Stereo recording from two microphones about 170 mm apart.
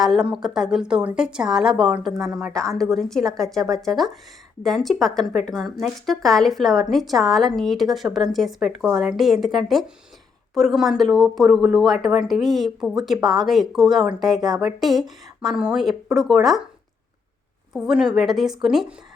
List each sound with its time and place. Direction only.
0.0 s speech: 5° right (ahead or behind)
17.7 s speech: 5° right (ahead or behind)